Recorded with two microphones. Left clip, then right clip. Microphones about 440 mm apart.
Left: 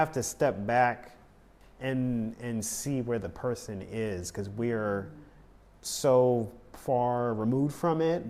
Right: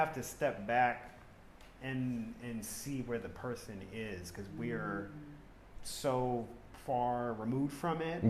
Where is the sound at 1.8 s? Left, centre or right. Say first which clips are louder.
Left 9 dB; left.